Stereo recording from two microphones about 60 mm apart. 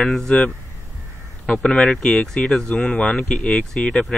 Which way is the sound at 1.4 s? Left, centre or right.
Centre.